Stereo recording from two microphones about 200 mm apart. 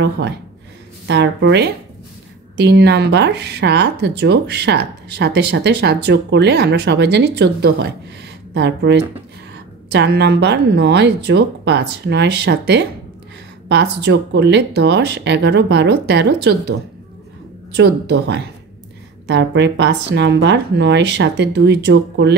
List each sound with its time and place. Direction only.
1.0 s speech: 60° right (ahead or behind)
17.7 s speech: 55° right (ahead or behind)